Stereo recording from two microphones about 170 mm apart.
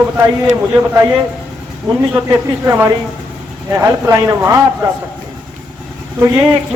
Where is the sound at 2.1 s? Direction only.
15° right (ahead or behind).